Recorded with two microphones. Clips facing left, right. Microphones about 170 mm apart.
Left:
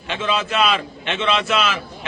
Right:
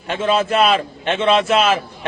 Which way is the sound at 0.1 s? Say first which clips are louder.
Right 5 dB; 50° right (ahead or behind).